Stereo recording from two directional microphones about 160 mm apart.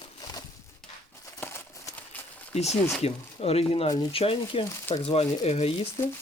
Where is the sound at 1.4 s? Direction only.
15° left (ahead or behind).